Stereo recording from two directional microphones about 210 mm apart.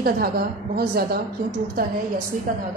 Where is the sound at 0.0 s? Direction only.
45° right (ahead or behind).